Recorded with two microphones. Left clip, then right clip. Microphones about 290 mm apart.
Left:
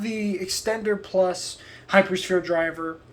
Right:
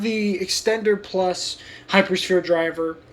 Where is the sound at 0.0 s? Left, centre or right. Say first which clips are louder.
Right 5 dB; centre.